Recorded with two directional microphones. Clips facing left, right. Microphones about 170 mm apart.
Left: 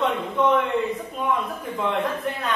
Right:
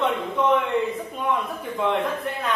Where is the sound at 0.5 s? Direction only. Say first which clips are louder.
Even; centre (ahead or behind).